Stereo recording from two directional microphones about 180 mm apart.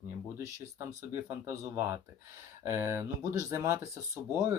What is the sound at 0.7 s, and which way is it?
Speech, 15° right (ahead or behind).